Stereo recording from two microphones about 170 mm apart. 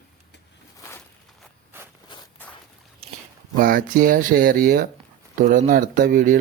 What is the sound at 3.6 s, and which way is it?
Speech, 55° right (ahead or behind).